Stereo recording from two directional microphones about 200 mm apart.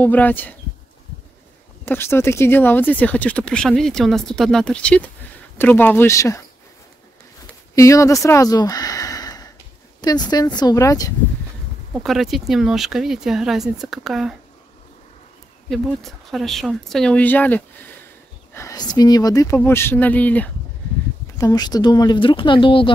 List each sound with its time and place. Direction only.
0.0 s speech: 10° left (ahead or behind)
1.9 s speech: 10° left (ahead or behind)
7.7 s speech: 15° left (ahead or behind)
11.9 s speech: centre (ahead or behind)
15.7 s speech: centre (ahead or behind)
21.4 s speech: 20° left (ahead or behind)